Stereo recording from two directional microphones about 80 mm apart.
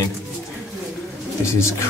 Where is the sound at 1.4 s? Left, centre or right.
Left.